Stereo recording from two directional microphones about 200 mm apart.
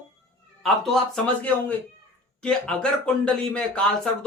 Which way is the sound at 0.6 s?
Centre (ahead or behind).